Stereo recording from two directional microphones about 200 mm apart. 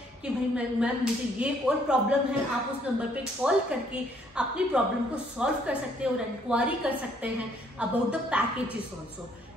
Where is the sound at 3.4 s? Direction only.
5° right (ahead or behind).